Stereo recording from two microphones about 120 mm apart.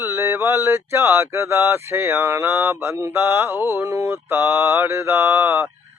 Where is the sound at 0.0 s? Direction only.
20° right (ahead or behind).